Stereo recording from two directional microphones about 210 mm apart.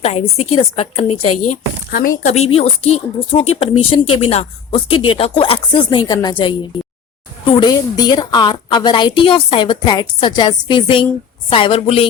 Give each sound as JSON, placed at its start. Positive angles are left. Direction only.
{"t": 0.0, "sound": "a woman's voice", "side_deg": 30}
{"t": 1.9, "sound": "a woman's voice", "side_deg": 40}